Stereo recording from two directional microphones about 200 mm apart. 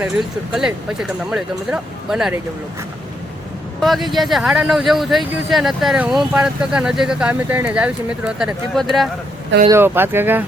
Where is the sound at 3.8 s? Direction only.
Centre (ahead or behind).